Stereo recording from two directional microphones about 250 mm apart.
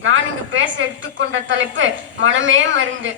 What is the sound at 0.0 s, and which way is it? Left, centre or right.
A woman's voice, right.